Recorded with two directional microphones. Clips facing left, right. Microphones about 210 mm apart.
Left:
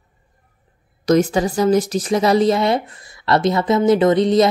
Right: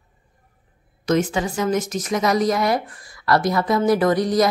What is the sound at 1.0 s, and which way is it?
A woman's voice, 40° left (ahead or behind).